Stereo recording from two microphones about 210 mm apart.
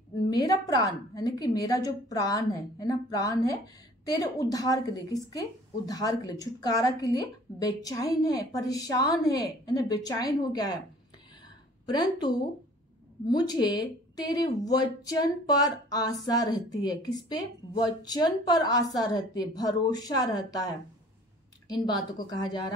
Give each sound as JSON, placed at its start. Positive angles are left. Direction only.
{"t": 0.3, "sound": "a woman's voice", "side_deg": 20}
{"t": 11.9, "sound": "speech", "side_deg": 20}